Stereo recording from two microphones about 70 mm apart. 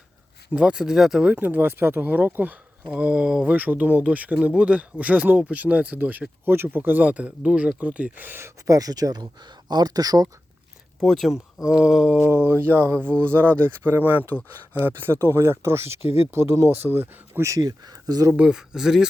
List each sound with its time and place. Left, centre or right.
0.5 s speech: centre
1.3 s speech: right
3.4 s speech: right
8.6 s speech: right
11.0 s speech: centre
11.3 s speech: centre
12.2 s speech: right
17.6 s speech: right
18.3 s speech: centre